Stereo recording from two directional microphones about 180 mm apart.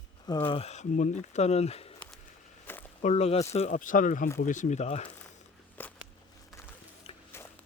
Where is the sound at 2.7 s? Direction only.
10° left (ahead or behind).